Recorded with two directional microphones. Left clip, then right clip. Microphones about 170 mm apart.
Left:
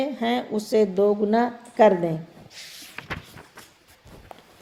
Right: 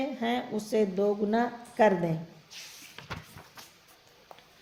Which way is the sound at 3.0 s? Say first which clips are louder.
Left 8 dB; 50° left (ahead or behind).